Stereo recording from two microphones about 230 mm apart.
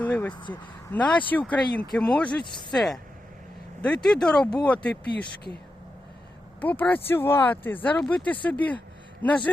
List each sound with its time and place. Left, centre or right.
0.0 s a sound: centre
0.5 s speech: centre
2.4 s speech: centre
2.7 s speech: centre
6.6 s speech: centre